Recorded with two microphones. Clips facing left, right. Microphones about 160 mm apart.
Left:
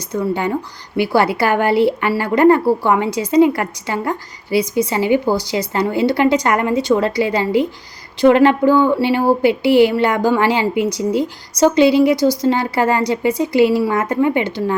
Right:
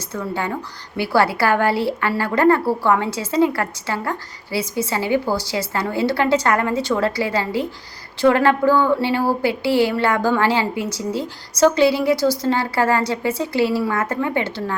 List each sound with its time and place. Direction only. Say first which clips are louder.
0.1 s a woman's voice: left 6 dB; 15° left (ahead or behind)